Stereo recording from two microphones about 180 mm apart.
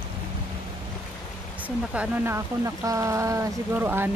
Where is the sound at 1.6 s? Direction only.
10° right (ahead or behind).